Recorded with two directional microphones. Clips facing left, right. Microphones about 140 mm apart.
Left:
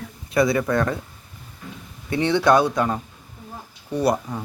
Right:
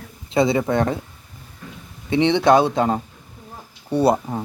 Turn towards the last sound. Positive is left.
turn(degrees=-25)  # may be behind; listen again after turning